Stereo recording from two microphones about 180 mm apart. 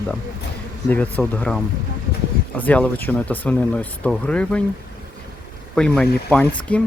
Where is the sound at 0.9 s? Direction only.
10° left (ahead or behind).